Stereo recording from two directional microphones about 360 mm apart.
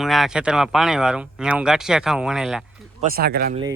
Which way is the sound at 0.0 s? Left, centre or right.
Centre.